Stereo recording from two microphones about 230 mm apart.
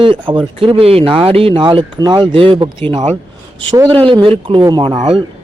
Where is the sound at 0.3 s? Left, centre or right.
Right.